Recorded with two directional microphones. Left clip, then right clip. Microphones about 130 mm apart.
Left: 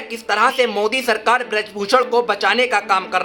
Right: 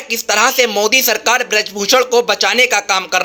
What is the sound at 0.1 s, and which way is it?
Speech, 25° right (ahead or behind).